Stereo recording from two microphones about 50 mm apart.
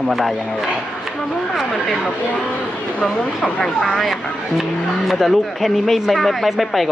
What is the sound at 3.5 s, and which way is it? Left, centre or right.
Speech, centre.